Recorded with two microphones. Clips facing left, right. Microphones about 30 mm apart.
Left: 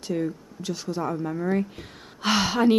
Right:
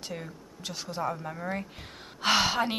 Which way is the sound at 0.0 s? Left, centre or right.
Centre.